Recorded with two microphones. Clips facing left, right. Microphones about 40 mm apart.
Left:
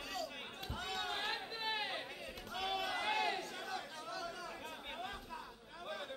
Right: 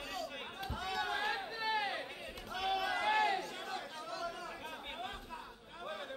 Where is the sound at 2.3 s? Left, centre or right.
Centre.